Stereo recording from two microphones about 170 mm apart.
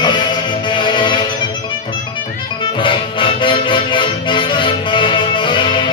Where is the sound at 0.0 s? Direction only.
25° left (ahead or behind).